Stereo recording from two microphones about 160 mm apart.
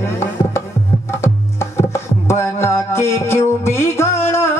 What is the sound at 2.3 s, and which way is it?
Music, 15° left (ahead or behind).